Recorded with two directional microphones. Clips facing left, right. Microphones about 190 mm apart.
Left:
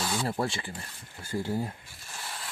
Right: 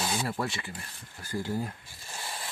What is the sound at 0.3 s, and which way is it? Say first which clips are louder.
Speech: left 2 dB; 25° left (ahead or behind).